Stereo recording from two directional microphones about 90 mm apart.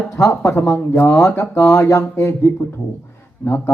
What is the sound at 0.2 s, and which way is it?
A man's voice, 30° left (ahead or behind).